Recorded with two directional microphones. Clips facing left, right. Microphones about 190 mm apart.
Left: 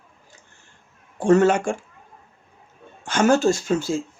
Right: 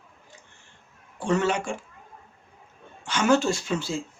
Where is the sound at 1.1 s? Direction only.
45° left (ahead or behind).